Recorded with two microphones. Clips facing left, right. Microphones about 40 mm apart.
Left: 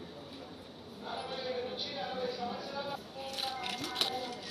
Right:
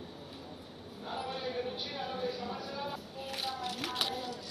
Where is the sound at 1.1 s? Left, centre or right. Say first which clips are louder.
Right 1 dB; right.